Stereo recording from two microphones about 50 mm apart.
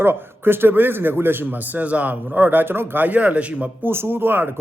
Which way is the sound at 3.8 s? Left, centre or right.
Right.